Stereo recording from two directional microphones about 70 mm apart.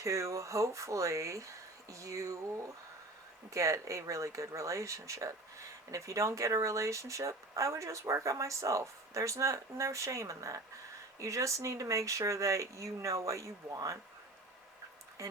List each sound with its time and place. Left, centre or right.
0.0 s speech: right
15.2 s speech: right